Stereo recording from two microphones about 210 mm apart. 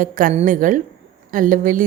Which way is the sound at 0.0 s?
40° right (ahead or behind).